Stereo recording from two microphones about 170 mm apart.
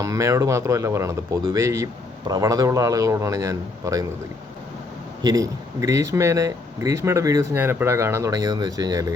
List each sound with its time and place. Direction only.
0.0 s speech: 20° right (ahead or behind)
5.2 s speech: 20° right (ahead or behind)